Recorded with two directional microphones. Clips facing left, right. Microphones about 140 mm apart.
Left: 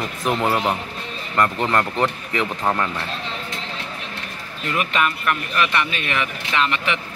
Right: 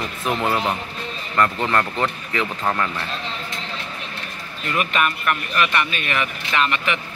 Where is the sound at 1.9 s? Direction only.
15° left (ahead or behind).